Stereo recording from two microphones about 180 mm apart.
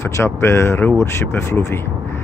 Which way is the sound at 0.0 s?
15° left (ahead or behind).